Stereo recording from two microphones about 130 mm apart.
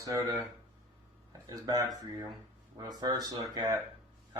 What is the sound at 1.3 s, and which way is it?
Speech, 30° right (ahead or behind).